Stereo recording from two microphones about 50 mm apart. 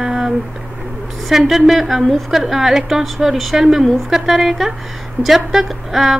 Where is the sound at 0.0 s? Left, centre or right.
Centre.